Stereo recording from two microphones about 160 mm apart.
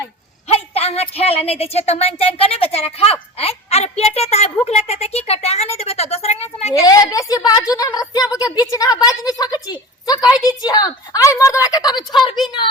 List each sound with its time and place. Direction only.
0.4 s a woman's voice: 40° left (ahead or behind)
6.7 s a woman's voice: 20° left (ahead or behind)